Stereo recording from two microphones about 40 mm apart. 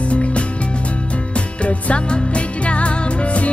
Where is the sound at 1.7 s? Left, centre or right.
Left.